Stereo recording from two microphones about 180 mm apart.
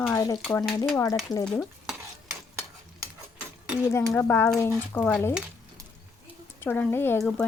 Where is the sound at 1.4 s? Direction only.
5° left (ahead or behind).